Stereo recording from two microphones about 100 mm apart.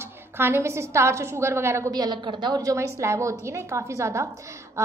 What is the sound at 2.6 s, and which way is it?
A woman's voice, 30° right (ahead or behind).